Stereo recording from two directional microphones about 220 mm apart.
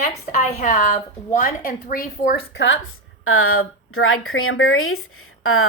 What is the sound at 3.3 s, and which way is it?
Speech, 70° left (ahead or behind).